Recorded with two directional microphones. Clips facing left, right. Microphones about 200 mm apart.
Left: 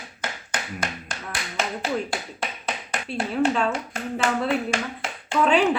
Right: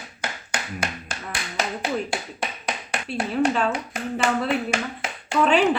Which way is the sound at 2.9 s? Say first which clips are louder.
Right 1 dB; 5° right (ahead or behind).